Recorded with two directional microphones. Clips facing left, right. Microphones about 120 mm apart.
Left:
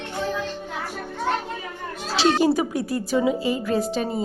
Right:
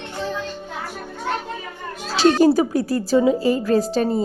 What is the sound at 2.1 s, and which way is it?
A woman's voice, 40° right (ahead or behind).